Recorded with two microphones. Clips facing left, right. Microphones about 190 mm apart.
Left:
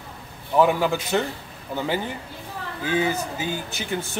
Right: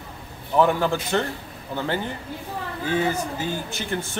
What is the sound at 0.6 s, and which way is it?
Speech, 10° left (ahead or behind).